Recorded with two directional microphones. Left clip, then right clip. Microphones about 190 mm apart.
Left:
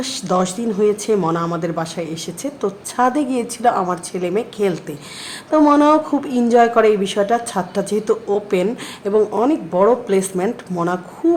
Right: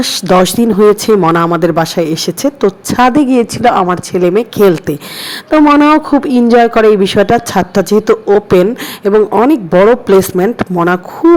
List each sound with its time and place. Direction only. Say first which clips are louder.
0.0 s speech: right 10 dB; 40° right (ahead or behind)